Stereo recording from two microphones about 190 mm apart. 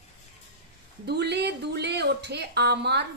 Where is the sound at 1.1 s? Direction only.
60° right (ahead or behind).